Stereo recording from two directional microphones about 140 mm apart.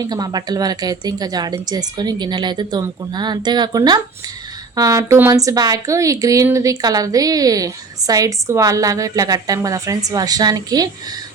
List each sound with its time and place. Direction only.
0.0 s a woman's voice: 30° right (ahead or behind)